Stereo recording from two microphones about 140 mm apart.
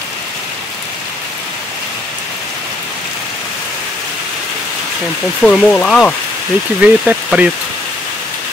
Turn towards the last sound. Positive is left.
turn(degrees=-5)  # may be behind; listen again after turning